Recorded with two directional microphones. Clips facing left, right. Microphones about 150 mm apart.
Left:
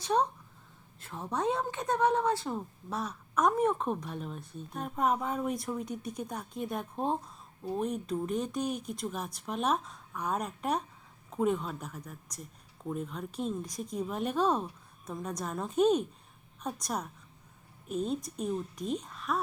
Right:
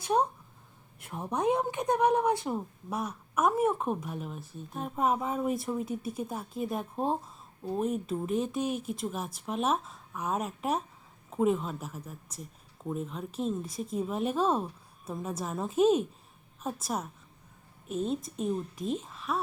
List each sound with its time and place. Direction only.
0.0 s a woman's voice: 10° right (ahead or behind)